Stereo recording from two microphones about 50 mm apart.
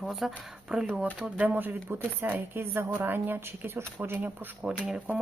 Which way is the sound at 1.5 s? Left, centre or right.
Right.